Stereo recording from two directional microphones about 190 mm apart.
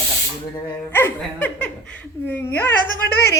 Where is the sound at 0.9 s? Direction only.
10° left (ahead or behind).